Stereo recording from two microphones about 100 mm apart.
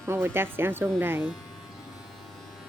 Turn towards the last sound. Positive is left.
turn(degrees=-20)  # may be behind; listen again after turning